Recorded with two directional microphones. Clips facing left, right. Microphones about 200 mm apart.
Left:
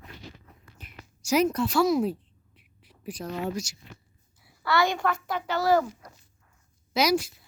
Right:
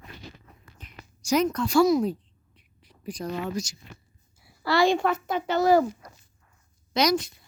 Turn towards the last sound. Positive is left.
turn(degrees=5)  # may be behind; listen again after turning